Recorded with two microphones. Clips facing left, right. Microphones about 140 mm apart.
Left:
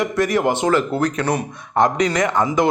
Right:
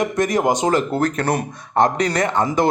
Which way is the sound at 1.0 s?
50° right (ahead or behind).